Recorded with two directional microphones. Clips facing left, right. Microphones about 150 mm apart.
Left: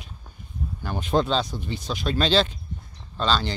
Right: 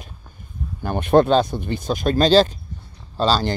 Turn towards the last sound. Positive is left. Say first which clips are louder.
# right 5 dB
turn(degrees=-40)  # may be behind; listen again after turning